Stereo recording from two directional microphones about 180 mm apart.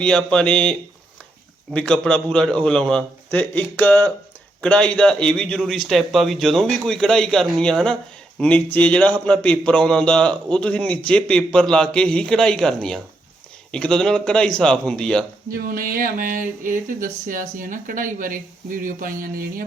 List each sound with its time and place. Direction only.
0.0 s a man's voice: 5° left (ahead or behind)
15.4 s speech: 55° right (ahead or behind)